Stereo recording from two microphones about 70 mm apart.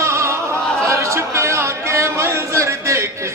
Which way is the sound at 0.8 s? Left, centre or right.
Right.